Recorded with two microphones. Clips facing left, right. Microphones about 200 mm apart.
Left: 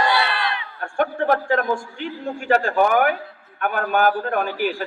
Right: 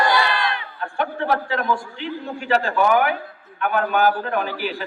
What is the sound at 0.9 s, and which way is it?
A man's voice, 45° left (ahead or behind).